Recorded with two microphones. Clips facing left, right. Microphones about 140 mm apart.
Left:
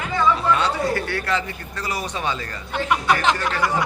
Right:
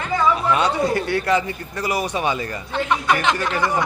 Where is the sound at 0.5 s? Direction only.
15° right (ahead or behind).